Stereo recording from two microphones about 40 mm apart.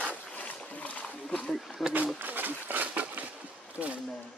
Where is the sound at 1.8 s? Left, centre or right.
Centre.